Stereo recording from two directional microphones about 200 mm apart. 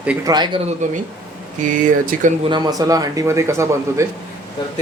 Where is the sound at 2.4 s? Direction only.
20° right (ahead or behind).